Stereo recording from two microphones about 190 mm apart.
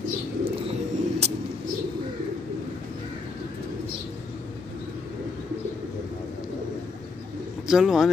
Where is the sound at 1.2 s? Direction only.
35° right (ahead or behind).